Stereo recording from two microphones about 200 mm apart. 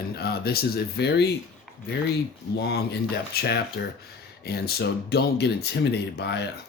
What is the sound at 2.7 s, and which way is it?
Speech, 55° left (ahead or behind).